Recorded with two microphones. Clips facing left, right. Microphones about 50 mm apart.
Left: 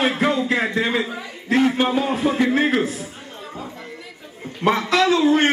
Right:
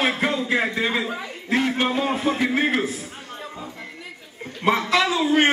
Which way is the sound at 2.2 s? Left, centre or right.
Centre.